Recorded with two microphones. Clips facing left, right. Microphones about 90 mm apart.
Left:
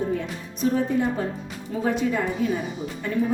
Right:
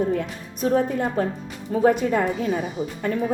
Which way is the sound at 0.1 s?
55° right (ahead or behind).